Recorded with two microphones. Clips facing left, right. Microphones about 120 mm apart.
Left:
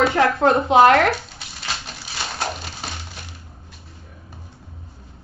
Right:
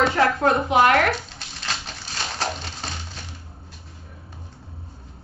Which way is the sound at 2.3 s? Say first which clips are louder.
Even; 5° left (ahead or behind).